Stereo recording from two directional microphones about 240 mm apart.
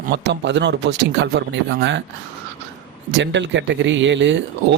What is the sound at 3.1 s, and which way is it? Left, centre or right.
Speech, right.